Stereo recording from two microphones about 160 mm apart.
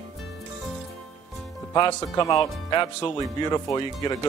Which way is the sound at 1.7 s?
30° left (ahead or behind).